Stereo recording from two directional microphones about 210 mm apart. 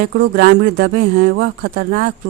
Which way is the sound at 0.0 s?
50° right (ahead or behind).